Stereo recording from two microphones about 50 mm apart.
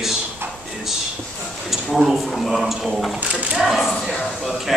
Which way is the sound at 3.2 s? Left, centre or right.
Right.